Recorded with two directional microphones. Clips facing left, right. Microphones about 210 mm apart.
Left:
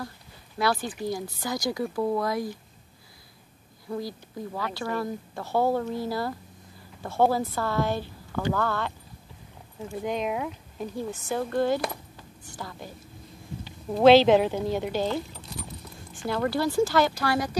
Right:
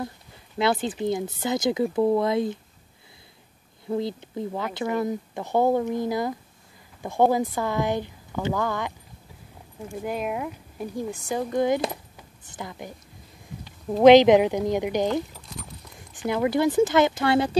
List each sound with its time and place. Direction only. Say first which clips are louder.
0.6 s speech: right 3 dB; 20° right (ahead or behind)
3.9 s a woman's voice: right 6 dB; 20° right (ahead or behind)
9.8 s speech: even; centre (ahead or behind); by 12.9 s 20° right (ahead or behind)
14.0 s a woman's voice: right 3 dB; 15° right (ahead or behind)